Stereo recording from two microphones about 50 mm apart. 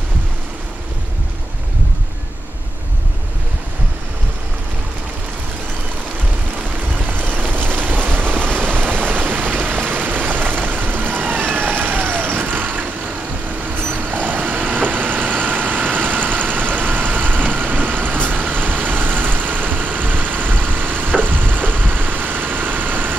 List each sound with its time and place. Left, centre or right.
7.1 s vehicle: right